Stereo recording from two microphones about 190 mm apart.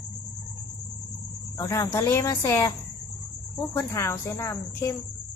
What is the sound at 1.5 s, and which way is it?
A woman's voice, 15° left (ahead or behind).